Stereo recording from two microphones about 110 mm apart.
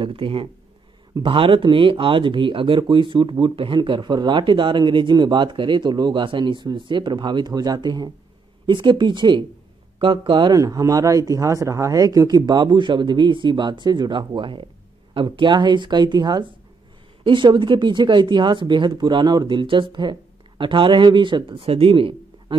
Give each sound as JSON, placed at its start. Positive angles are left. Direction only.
{"t": 0.0, "sound": "speech", "side_deg": -55}
{"t": 10.6, "sound": "speech", "side_deg": -30}